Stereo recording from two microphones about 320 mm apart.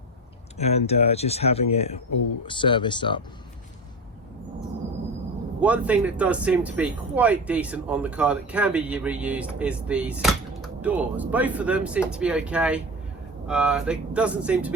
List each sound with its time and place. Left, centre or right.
0.6 s speech: centre
5.5 s speech: centre